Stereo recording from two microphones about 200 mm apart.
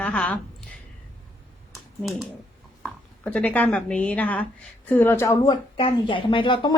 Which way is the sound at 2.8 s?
5° left (ahead or behind).